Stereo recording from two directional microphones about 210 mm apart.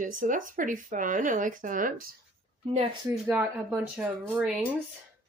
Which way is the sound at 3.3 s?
5° right (ahead or behind).